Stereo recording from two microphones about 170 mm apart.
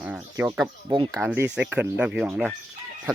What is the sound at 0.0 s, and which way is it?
Bird, 5° right (ahead or behind).